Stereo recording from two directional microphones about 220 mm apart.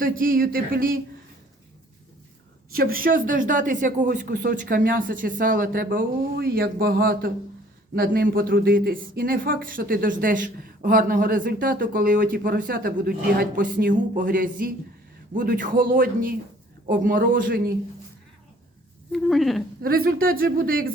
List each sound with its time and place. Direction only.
0.0 s speech: 40° right (ahead or behind)
2.7 s speech: 40° right (ahead or behind)
19.1 s speech: centre (ahead or behind)
19.8 s speech: 40° right (ahead or behind)